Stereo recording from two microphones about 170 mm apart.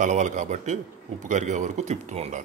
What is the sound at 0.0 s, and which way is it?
Speech, 45° right (ahead or behind).